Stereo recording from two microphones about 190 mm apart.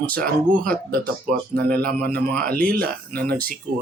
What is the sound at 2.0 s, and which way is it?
Speech, 5° left (ahead or behind).